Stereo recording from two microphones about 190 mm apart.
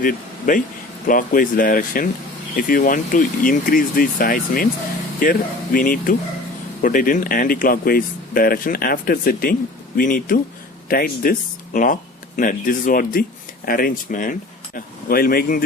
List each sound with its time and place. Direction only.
0.0 s speech: 45° left (ahead or behind)